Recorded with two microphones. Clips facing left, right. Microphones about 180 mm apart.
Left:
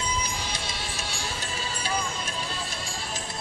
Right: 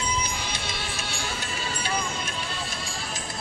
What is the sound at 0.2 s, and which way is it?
Music, 35° left (ahead or behind).